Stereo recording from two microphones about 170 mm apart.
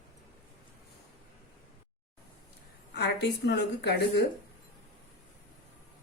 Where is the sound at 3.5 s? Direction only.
80° left.